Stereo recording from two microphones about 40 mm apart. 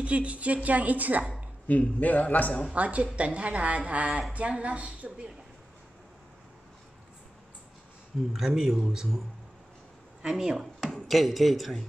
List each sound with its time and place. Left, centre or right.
0.0 s a woman's voice: right
1.7 s a man's voice: left
2.7 s a woman's voice: right
8.3 s speech: centre
10.2 s speech: centre
10.8 s speech: centre